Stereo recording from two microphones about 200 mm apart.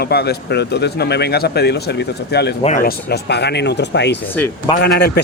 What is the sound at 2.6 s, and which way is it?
Speech, 45° left (ahead or behind).